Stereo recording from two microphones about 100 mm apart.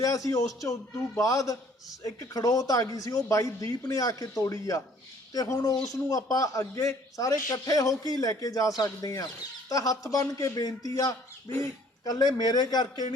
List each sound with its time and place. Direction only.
0.0 s speech: 35° left (ahead or behind)